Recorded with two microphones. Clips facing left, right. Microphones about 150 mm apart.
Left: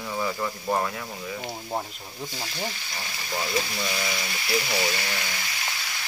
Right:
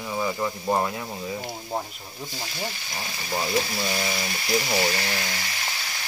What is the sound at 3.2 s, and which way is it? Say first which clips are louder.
Speech: right 3 dB; 30° right (ahead or behind).